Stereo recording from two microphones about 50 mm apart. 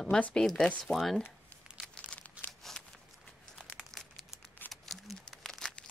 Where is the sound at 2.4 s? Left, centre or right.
Left.